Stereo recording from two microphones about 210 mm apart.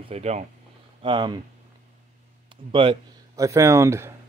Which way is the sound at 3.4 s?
15° right (ahead or behind).